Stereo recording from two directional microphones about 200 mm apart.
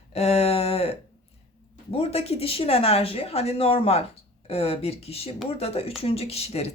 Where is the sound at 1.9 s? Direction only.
30° left (ahead or behind).